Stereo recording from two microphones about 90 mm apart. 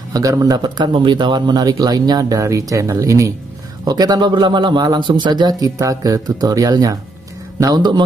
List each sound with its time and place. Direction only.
0.1 s a man's voice: 40° right (ahead or behind)
0.9 s a man's voice: 60° right (ahead or behind); by 3.3 s 35° right (ahead or behind)
3.8 s a man's voice: 50° right (ahead or behind)